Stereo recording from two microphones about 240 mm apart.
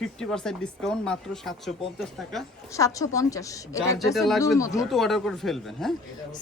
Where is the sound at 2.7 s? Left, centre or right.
Centre.